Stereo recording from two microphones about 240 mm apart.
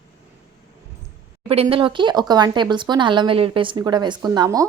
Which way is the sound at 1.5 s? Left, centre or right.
Right.